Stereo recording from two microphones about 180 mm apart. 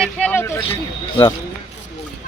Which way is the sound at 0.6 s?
30° left (ahead or behind).